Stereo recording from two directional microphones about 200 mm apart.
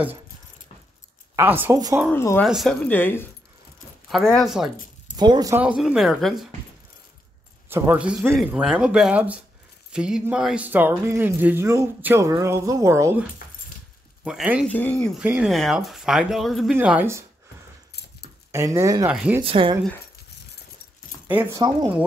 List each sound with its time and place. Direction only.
1.3 s speech: 10° right (ahead or behind)
2.0 s speech: 10° left (ahead or behind)
2.4 s speech: centre (ahead or behind)
5.1 s speech: 20° right (ahead or behind)
5.6 s speech: 5° right (ahead or behind)
7.7 s speech: 10° right (ahead or behind)
14.2 s speech: 5° right (ahead or behind)
14.7 s speech: 5° left (ahead or behind); by 17.2 s 10° right (ahead or behind)
18.5 s speech: 15° right (ahead or behind)
19.4 s speech: 25° right (ahead or behind)
21.3 s speech: 10° right (ahead or behind)